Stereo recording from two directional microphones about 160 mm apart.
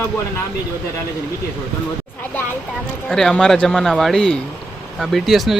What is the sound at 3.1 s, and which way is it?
Speech, 5° left (ahead or behind).